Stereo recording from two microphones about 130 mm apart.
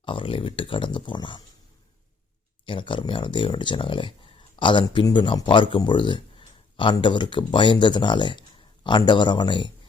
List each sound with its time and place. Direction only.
0.0 s speech: 40° left (ahead or behind)
2.6 s speech: 40° left (ahead or behind)